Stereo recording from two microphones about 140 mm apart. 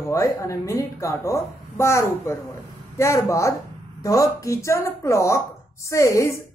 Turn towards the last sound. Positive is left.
turn(degrees=20)  # may be behind; listen again after turning